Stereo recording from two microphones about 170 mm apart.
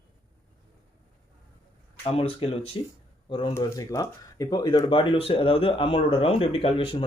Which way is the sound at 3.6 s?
20° left (ahead or behind).